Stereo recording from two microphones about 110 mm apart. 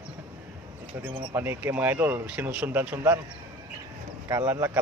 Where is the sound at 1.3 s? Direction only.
20° right (ahead or behind).